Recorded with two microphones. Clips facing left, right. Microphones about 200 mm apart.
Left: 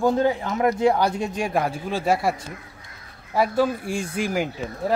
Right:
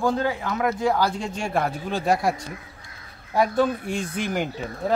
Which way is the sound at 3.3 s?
5° left (ahead or behind).